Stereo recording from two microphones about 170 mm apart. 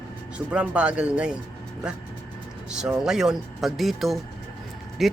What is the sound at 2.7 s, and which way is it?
Speech, 5° right (ahead or behind).